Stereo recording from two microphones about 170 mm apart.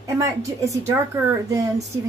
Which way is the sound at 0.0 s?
20° right (ahead or behind).